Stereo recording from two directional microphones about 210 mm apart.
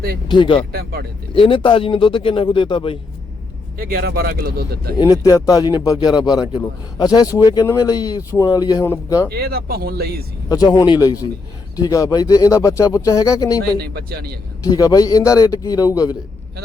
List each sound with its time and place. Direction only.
0.3 s a man's voice: 25° left (ahead or behind)
0.7 s speech: 50° right (ahead or behind)
1.3 s a man's voice: 25° left (ahead or behind)
3.8 s speech: 45° right (ahead or behind)
4.9 s speech: 15° left (ahead or behind)
9.3 s speech: 45° right (ahead or behind)
10.5 s a man's voice: 20° left (ahead or behind)
13.7 s speech: 45° right (ahead or behind)
14.6 s speech: 15° left (ahead or behind)